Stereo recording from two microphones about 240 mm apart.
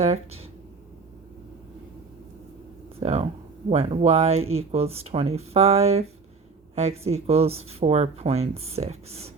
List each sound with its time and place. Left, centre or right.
0.0 s speech: right
3.0 s speech: right